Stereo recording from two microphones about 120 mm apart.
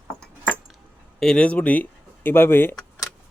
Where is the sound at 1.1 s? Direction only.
5° left (ahead or behind).